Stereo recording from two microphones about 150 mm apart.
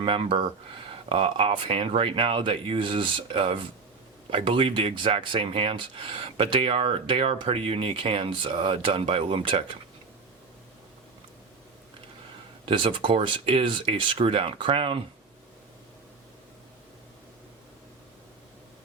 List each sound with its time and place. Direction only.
0.0 s speech: 35° right (ahead or behind)
12.6 s speech: 35° right (ahead or behind)